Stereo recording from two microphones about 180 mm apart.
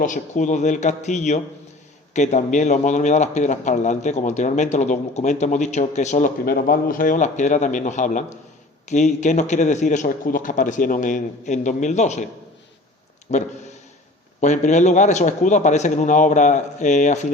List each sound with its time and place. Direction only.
0.0 s a man's voice: 45° left (ahead or behind)
13.3 s a man's voice: 40° left (ahead or behind)